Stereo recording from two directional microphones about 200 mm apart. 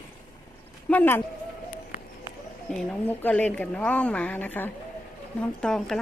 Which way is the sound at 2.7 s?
5° left (ahead or behind).